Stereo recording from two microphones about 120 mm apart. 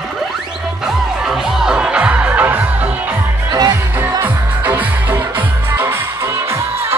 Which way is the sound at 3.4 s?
35° right (ahead or behind).